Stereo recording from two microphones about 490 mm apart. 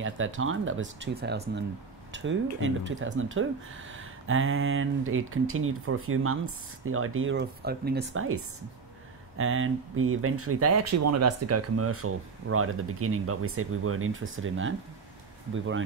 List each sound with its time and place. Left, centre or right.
0.0 s speech: right
9.4 s speech: right